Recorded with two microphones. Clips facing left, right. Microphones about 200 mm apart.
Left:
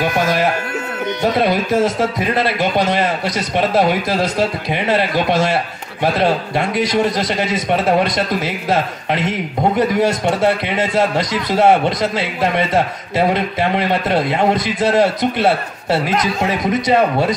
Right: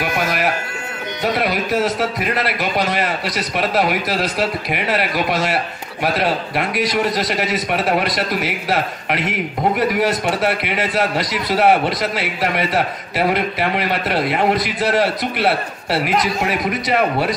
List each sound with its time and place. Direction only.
1.2 s a man's voice: 25° left (ahead or behind)